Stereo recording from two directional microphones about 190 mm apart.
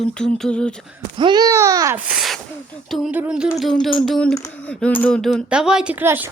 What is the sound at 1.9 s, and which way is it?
Sneeze, 5° right (ahead or behind).